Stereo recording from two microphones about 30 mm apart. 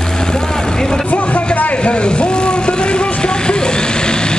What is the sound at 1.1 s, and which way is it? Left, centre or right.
Vehicle, left.